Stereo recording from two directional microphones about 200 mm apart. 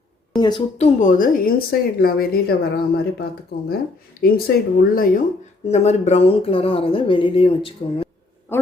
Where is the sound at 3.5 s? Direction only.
55° left (ahead or behind).